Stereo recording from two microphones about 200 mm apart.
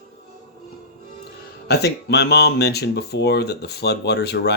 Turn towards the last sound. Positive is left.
turn(degrees=55)  # may be behind; listen again after turning